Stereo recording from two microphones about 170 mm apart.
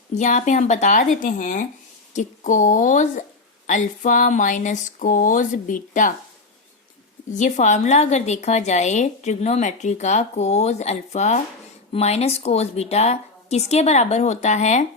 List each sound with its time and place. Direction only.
0.1 s a woman's voice: 45° left (ahead or behind)
7.3 s a woman's voice: 45° left (ahead or behind)